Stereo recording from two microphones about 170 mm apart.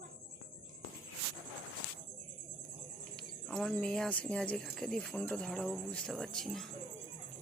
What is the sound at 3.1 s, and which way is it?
Speech, centre (ahead or behind).